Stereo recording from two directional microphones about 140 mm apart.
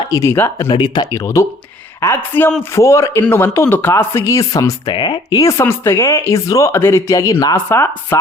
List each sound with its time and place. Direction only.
0.1 s speech: 20° left (ahead or behind)
0.7 s speech: 35° left (ahead or behind)
1.1 s speech: 20° left (ahead or behind)
5.4 s speech: 20° left (ahead or behind)